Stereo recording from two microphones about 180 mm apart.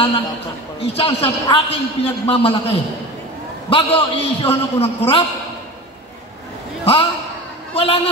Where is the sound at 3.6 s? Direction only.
30° left (ahead or behind).